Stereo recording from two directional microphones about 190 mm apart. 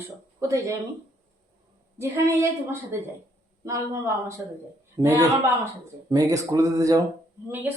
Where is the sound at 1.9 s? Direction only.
15° right (ahead or behind).